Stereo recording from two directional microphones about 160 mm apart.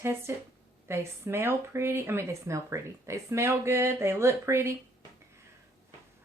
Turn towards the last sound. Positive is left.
turn(degrees=-15)  # may be behind; listen again after turning